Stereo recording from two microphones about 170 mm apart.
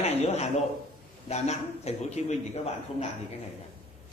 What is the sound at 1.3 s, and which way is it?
A man's voice, 40° left (ahead or behind).